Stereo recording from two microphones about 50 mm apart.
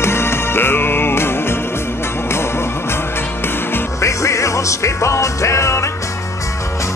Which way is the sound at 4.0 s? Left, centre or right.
Left.